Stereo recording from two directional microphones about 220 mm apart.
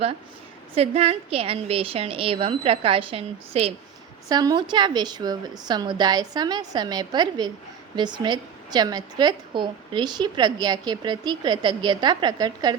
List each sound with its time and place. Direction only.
0.8 s a woman's voice: 25° right (ahead or behind)